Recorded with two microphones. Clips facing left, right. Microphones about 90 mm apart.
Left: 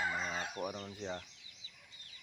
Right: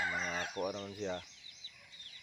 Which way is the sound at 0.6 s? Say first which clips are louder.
Right 3 dB; 10° left (ahead or behind).